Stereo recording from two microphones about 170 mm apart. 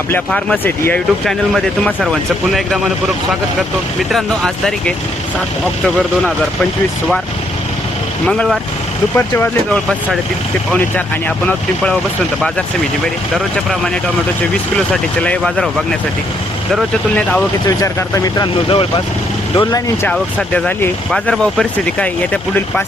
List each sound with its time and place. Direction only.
0.3 s speech: 5° left (ahead or behind)
4.1 s speech: 5° left (ahead or behind)
8.3 s speech: 5° left (ahead or behind)
13.3 s speech: centre (ahead or behind)
15.2 s speech: 5° left (ahead or behind)
17.7 s speech: 20° left (ahead or behind)
18.7 s speech: 30° left (ahead or behind)
19.5 s speech: 20° left (ahead or behind)
20.1 s speech: 5° left (ahead or behind)